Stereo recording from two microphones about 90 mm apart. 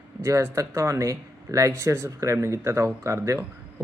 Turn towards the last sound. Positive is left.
turn(degrees=-35)  # may be behind; listen again after turning